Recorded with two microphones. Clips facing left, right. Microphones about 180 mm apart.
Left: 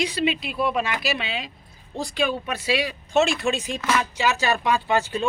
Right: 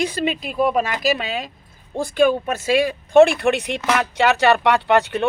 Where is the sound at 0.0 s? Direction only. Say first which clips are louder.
Right 2 dB; 45° right (ahead or behind).